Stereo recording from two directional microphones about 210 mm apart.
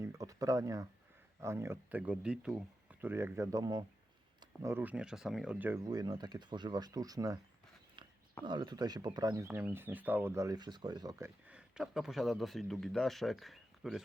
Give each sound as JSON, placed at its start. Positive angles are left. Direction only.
{"t": 0.0, "sound": "speech", "side_deg": -15}
{"t": 8.4, "sound": "speech", "side_deg": -20}
{"t": 11.4, "sound": "speech", "side_deg": -5}